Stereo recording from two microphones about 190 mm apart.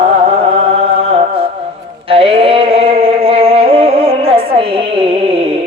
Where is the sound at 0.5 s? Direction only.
30° right (ahead or behind).